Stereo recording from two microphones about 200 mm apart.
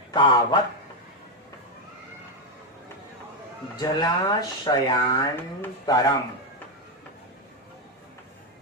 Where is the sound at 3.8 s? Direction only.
20° left (ahead or behind).